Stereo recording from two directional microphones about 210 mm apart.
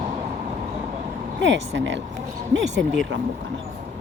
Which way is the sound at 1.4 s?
60° right (ahead or behind).